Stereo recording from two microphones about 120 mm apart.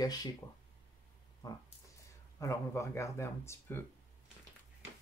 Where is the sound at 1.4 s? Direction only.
35° left (ahead or behind).